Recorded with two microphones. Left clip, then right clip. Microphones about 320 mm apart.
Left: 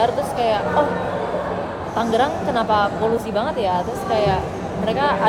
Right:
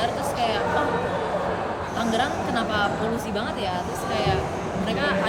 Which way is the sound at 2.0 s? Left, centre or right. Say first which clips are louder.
Left 6 dB; centre.